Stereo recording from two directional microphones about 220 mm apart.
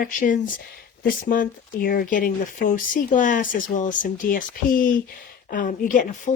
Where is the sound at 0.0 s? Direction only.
40° left (ahead or behind).